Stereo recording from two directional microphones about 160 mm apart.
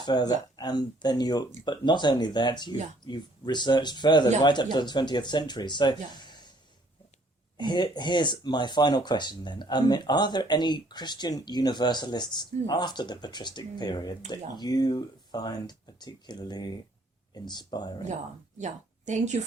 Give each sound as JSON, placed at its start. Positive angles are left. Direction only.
{"t": 0.0, "sound": "speech", "side_deg": 25}
{"t": 7.6, "sound": "speech", "side_deg": 25}
{"t": 18.5, "sound": "a woman's voice", "side_deg": -50}